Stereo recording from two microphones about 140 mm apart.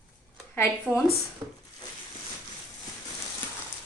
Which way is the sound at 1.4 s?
25° right (ahead or behind).